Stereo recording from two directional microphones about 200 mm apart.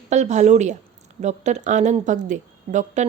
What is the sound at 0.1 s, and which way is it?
Speech, 35° right (ahead or behind).